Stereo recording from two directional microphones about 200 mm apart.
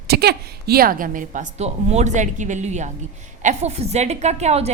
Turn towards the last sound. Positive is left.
turn(degrees=-35)  # may be behind; listen again after turning